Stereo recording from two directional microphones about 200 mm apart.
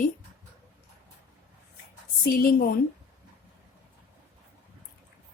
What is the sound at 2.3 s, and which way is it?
Speech, 45° left (ahead or behind).